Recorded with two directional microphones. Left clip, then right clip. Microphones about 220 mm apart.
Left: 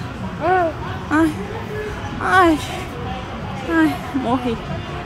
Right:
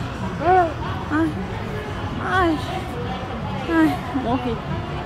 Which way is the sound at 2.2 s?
30° left (ahead or behind).